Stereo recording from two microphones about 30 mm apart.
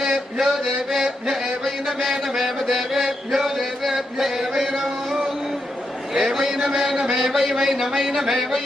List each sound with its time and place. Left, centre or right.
0.3 s chant: centre
0.9 s music: centre
1.6 s chant: centre
3.0 s mantra: centre
3.9 s chant: centre
6.1 s a man's voice: centre
7.2 s a man's voice: centre
8.3 s chant: centre